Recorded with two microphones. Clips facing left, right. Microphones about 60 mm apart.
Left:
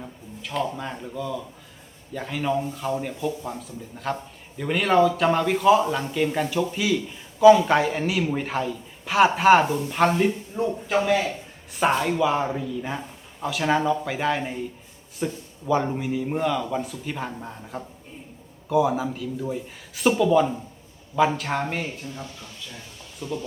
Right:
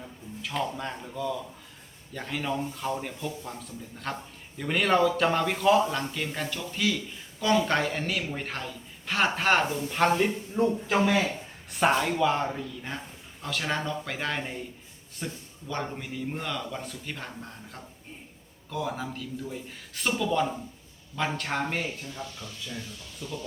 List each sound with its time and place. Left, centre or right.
0.4 s a man's voice: centre
23.2 s speech: left